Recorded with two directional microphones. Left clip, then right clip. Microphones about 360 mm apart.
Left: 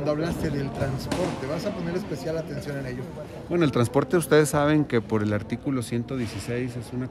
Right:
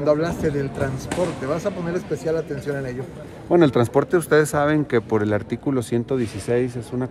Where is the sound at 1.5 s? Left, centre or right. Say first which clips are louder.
Right 5 dB; centre.